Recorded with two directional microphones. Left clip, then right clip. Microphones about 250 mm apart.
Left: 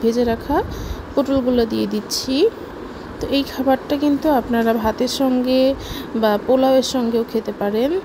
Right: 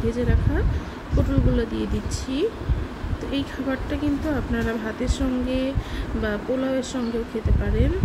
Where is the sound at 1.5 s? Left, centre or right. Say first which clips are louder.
Left 7 dB; centre.